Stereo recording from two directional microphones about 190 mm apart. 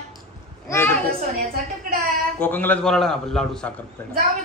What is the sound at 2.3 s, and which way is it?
Child singing, 10° left (ahead or behind).